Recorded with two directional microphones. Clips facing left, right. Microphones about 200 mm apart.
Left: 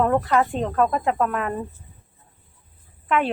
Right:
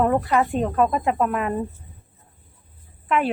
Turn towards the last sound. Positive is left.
turn(degrees=-5)  # may be behind; listen again after turning